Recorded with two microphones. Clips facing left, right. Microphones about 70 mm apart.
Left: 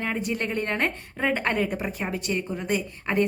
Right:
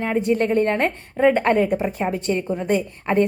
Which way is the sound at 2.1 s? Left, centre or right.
Right.